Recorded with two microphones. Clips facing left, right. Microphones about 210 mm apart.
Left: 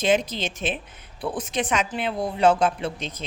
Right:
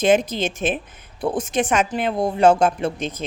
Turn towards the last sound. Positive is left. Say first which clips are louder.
# right 6 dB
turn(degrees=-50)  # may be behind; listen again after turning